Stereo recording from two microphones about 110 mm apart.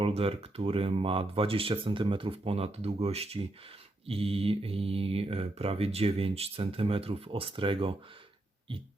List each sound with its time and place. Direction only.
0.0 s speech: 60° right (ahead or behind)